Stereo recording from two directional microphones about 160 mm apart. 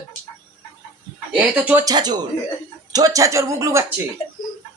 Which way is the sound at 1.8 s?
25° right (ahead or behind).